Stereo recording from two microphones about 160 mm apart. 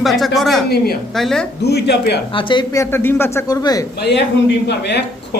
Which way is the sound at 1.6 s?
90° left.